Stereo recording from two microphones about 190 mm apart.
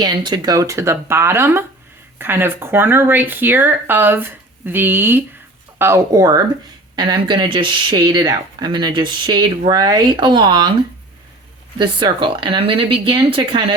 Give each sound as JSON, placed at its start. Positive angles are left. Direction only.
{"t": 0.0, "sound": "speech", "side_deg": -20}
{"t": 11.8, "sound": "speech", "side_deg": -25}